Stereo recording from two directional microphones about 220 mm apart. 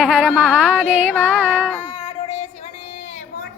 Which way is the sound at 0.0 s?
5° left (ahead or behind).